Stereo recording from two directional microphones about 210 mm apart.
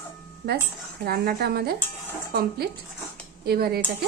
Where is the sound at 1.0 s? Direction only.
45° right (ahead or behind).